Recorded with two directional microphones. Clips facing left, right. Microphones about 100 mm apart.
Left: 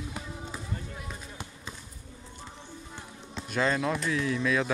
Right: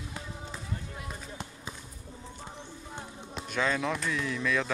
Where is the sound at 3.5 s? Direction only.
5° left (ahead or behind).